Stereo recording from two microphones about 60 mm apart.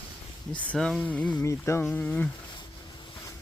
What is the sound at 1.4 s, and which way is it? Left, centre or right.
Speech, left.